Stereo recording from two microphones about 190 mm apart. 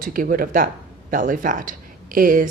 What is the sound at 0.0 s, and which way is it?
A woman's voice, 45° right (ahead or behind).